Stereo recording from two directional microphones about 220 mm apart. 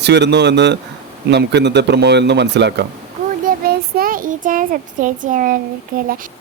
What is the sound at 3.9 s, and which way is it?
A child's voice, 40° right (ahead or behind).